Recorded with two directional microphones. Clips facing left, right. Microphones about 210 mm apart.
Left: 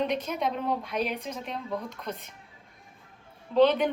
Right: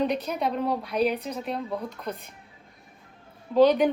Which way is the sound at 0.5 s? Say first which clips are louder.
Right 3 dB; 5° right (ahead or behind).